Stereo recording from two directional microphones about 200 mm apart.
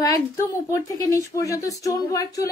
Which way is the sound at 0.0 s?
15° left (ahead or behind).